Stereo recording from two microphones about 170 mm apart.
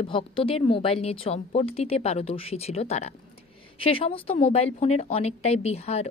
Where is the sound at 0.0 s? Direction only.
30° left (ahead or behind).